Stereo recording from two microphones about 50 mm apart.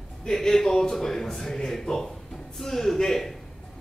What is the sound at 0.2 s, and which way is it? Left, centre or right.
A man's voice, centre.